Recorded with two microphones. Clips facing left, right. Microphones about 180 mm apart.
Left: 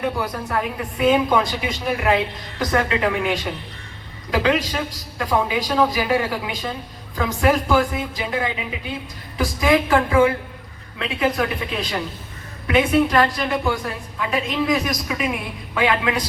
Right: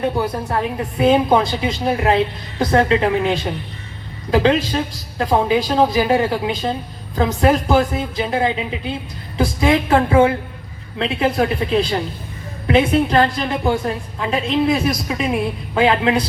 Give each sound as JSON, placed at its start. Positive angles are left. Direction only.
{"t": 0.5, "sound": "a woman's voice", "side_deg": -30}